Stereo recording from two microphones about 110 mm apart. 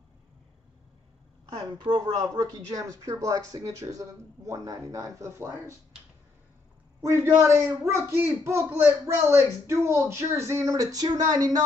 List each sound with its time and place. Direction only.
1.5 s speech: 45° right (ahead or behind); by 5.8 s 25° right (ahead or behind)
7.3 s speech: 25° right (ahead or behind)